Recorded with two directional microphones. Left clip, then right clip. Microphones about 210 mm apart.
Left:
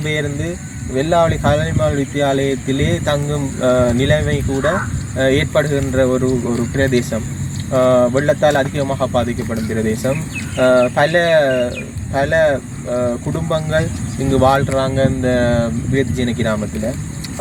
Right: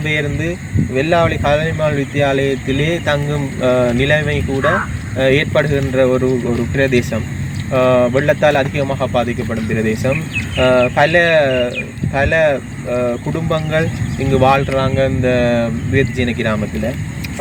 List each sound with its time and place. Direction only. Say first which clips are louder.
0.0 s speech: right 2 dB; 5° left (ahead or behind)
9.8 s speech: right 2 dB; 5° right (ahead or behind)
10.1 s speech: right 3 dB; 5° left (ahead or behind)
11.4 s speech: right 1 dB; 15° right (ahead or behind)
12.1 s speech: right 1 dB; 5° left (ahead or behind)